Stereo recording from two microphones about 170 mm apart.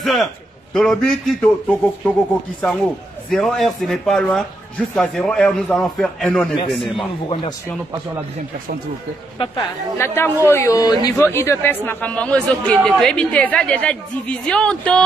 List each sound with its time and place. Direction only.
0.0 s a man's voice: centre (ahead or behind)
9.4 s a woman's voice: 30° left (ahead or behind)
9.9 s a man's voice: 15° left (ahead or behind)